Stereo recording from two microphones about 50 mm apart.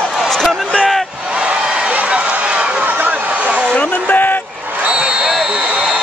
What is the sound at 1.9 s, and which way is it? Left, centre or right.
Run, right.